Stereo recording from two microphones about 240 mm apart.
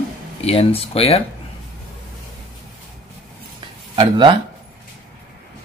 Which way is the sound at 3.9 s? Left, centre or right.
Right.